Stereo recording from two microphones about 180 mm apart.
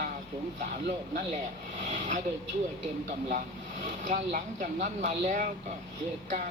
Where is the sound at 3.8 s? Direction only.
45° right (ahead or behind).